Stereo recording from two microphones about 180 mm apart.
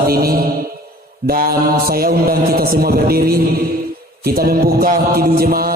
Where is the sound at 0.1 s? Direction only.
55° right (ahead or behind).